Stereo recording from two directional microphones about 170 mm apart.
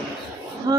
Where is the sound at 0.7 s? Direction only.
25° right (ahead or behind).